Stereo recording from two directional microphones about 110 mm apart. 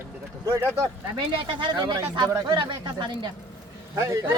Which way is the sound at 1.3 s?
50° right (ahead or behind).